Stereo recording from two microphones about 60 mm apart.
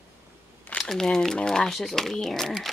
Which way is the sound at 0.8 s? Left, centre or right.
Centre.